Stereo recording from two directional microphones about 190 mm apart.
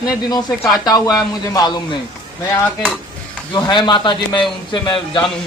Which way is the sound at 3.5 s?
20° left (ahead or behind).